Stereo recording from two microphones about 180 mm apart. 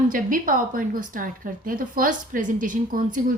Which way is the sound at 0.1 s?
50° right (ahead or behind).